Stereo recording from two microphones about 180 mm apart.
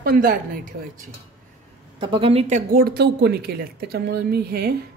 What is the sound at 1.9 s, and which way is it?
Speech, 30° right (ahead or behind).